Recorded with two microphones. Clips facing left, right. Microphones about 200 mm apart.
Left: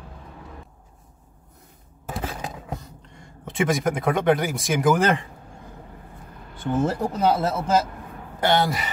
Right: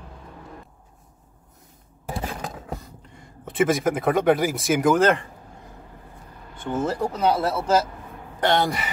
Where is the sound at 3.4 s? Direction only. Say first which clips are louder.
Right 2 dB; centre (ahead or behind).